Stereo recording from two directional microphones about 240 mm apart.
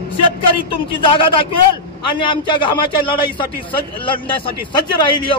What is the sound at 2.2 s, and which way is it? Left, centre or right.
Speech, centre.